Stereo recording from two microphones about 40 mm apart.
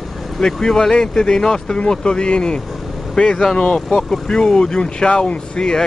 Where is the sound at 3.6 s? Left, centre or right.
Left.